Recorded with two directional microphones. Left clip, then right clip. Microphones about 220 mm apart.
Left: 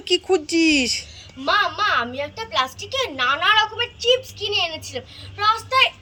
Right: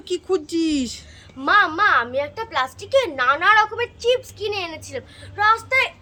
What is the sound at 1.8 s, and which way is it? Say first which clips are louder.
A child's voice: right 3 dB; 15° right (ahead or behind).